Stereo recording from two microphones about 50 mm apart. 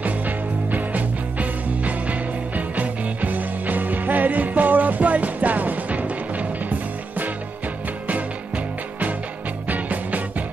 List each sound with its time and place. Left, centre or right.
0.7 s music: right
9.7 s music: right